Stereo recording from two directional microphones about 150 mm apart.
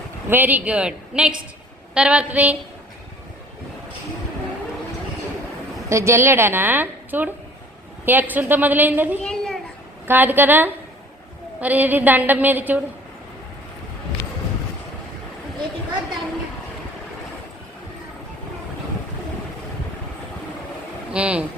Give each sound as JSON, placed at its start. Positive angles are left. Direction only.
{"t": 0.3, "sound": "a woman's voice", "side_deg": -10}
{"t": 5.9, "sound": "a woman's voice", "side_deg": -20}
{"t": 9.2, "sound": "a sound", "side_deg": 5}
{"t": 10.1, "sound": "a woman's voice", "side_deg": -15}
{"t": 21.1, "sound": "speech", "side_deg": -10}